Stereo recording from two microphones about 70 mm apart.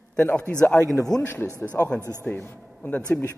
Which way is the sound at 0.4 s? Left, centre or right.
Centre.